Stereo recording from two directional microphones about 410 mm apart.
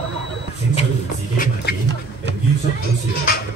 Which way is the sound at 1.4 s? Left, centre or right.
Left.